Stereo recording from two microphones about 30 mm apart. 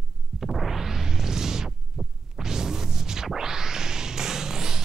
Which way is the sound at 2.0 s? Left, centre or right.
Centre.